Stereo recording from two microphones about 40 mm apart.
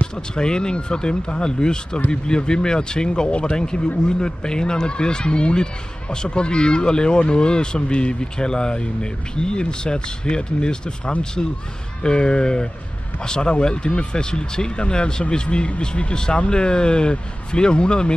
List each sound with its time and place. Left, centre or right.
0.0 s speech: left